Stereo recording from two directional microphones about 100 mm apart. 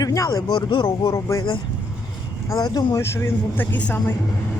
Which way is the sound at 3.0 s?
25° left (ahead or behind).